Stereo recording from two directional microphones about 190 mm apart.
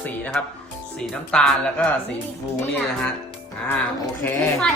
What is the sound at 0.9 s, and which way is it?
Speech, 5° left (ahead or behind).